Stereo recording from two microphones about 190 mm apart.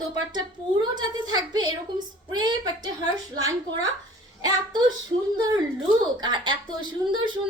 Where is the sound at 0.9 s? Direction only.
20° right (ahead or behind).